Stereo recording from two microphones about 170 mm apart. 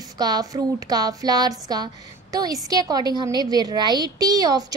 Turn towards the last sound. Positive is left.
turn(degrees=-20)  # may be behind; listen again after turning